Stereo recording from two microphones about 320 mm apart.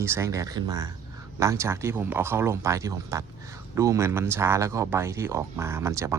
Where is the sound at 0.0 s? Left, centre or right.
Centre.